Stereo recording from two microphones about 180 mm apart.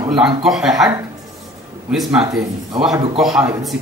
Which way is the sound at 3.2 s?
Centre (ahead or behind).